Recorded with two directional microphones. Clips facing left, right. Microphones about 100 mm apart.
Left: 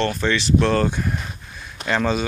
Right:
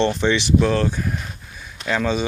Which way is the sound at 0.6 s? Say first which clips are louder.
Even; 5° right (ahead or behind).